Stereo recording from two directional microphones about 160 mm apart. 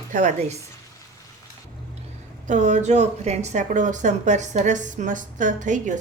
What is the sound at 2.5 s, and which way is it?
Speech, 50° right (ahead or behind).